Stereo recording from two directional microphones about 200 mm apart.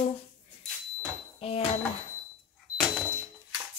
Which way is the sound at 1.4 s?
30° left (ahead or behind).